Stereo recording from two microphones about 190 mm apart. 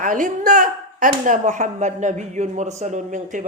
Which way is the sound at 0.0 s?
45° right (ahead or behind).